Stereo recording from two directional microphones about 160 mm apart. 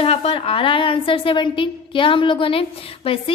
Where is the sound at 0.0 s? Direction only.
40° left (ahead or behind).